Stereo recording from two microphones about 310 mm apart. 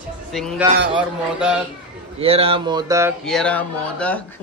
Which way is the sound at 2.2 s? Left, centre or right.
Centre.